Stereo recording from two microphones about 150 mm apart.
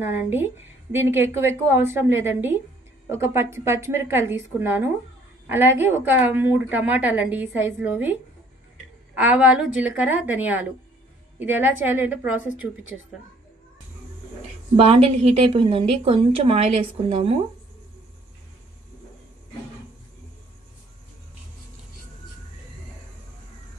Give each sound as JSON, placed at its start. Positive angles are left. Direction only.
{"t": 0.0, "sound": "a woman's voice", "side_deg": -15}
{"t": 14.8, "sound": "a woman's voice", "side_deg": -40}